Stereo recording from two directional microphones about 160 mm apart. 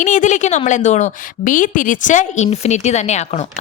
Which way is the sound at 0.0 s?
50° left (ahead or behind).